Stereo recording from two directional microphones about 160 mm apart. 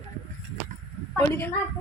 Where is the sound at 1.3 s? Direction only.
15° left (ahead or behind).